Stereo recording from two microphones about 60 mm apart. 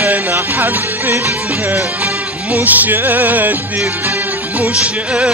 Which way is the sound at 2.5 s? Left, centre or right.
Right.